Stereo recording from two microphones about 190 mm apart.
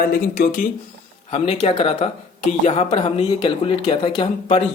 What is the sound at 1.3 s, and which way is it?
Speech, 30° left (ahead or behind).